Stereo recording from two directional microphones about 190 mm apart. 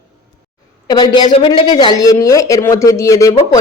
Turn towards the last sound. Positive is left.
turn(degrees=15)  # may be behind; listen again after turning